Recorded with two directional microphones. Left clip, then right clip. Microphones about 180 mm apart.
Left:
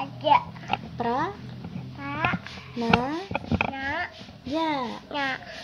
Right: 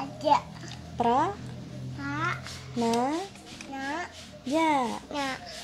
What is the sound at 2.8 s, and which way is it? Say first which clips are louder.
Speech: left 2 dB; 5° right (ahead or behind).